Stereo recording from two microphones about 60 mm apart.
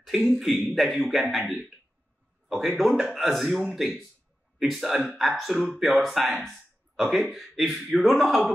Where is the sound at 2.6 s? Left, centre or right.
Centre.